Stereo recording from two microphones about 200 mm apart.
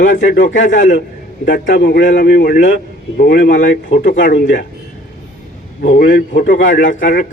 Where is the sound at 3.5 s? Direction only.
40° left (ahead or behind).